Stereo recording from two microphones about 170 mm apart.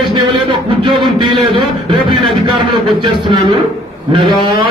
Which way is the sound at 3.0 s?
30° right (ahead or behind).